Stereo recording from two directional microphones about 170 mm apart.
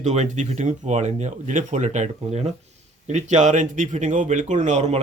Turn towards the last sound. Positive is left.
turn(degrees=-40)  # may be behind; listen again after turning